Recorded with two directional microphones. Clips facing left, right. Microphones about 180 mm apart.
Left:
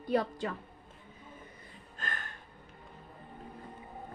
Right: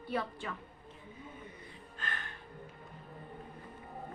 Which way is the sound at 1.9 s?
45° left (ahead or behind).